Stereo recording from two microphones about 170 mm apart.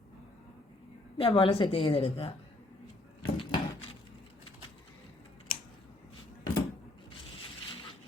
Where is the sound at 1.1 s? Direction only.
30° left (ahead or behind).